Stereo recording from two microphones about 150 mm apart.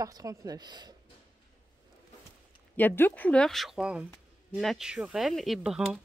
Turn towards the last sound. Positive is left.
turn(degrees=-5)  # may be behind; listen again after turning